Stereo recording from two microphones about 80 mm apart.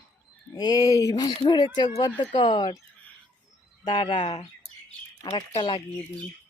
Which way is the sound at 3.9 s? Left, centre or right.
Left.